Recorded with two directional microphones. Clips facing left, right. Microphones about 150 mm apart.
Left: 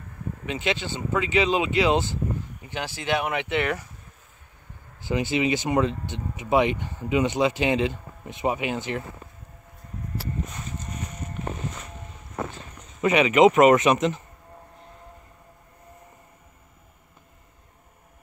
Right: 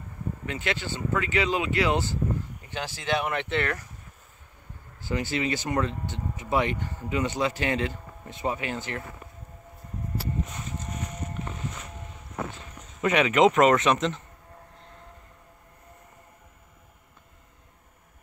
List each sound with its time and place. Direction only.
0.5 s speech: 20° left (ahead or behind)
5.0 s speech: 20° left (ahead or behind)
12.4 s speech: centre (ahead or behind)